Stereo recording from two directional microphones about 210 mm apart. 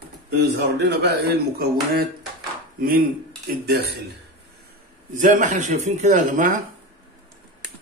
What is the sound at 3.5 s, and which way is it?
Speech, 50° right (ahead or behind).